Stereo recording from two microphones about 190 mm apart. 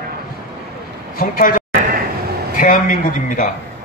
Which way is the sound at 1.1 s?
45° left (ahead or behind).